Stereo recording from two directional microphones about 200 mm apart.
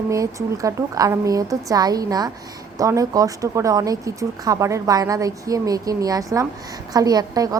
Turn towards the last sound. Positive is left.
turn(degrees=-20)  # may be behind; listen again after turning